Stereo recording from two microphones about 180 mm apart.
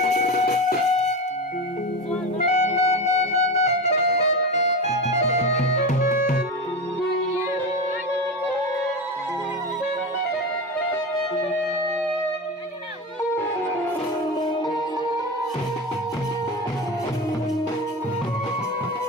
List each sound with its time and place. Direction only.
0.0 s music: 45° left (ahead or behind)
2.4 s music: 40° left (ahead or behind)